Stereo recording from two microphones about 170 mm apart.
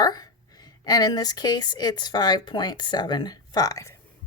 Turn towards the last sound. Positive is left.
turn(degrees=20)  # may be behind; listen again after turning